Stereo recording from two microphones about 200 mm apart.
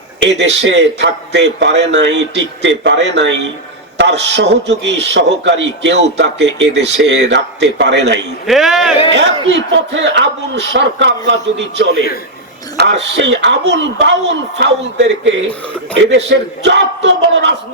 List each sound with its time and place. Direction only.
0.2 s a man's voice: 60° right (ahead or behind)
8.4 s speech: centre (ahead or behind)
9.1 s a man's voice: 60° right (ahead or behind)
12.7 s a man's voice: 60° right (ahead or behind)